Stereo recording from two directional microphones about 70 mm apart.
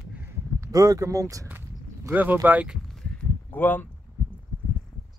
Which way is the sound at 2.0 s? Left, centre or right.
Right.